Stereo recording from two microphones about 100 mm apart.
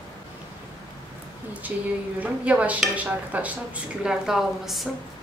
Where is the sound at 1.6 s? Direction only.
15° right (ahead or behind).